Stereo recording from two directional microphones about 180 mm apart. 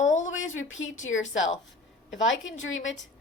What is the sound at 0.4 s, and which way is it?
A woman's voice, 90° left.